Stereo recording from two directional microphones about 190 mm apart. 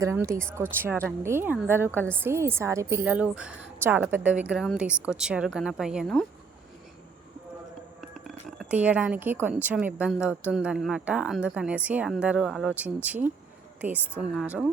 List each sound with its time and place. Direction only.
0.0 s a woman's voice: 15° right (ahead or behind); by 6.2 s centre (ahead or behind)
8.7 s a woman's voice: 10° right (ahead or behind)